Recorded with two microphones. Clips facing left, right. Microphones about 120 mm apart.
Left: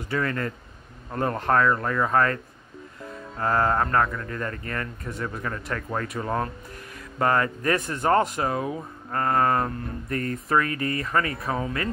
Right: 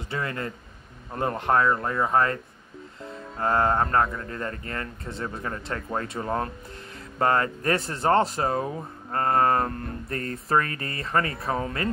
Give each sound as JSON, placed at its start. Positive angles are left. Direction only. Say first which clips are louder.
{"t": 0.1, "sound": "speech", "louder": "left 4 dB", "side_deg": -25}